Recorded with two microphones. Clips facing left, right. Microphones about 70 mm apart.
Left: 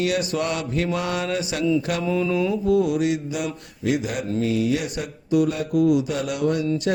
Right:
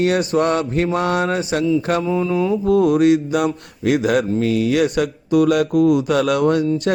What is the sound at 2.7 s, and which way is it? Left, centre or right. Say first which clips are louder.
Mantra: right 8 dB; right.